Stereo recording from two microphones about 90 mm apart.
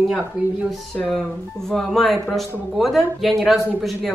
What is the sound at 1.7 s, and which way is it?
Speech, 5° left (ahead or behind).